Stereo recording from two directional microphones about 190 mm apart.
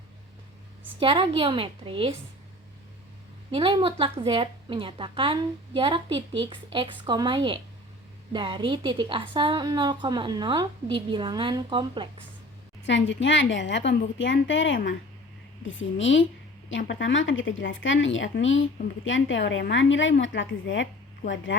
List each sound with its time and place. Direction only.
0.9 s a woman's voice: 30° right (ahead or behind)
3.5 s a woman's voice: 25° right (ahead or behind)
12.8 s a woman's voice: 75° left (ahead or behind)
15.6 s a woman's voice: 90° left; by 21.4 s 70° left (ahead or behind)